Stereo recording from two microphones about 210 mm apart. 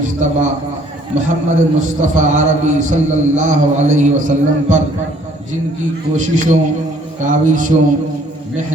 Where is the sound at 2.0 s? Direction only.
35° right (ahead or behind).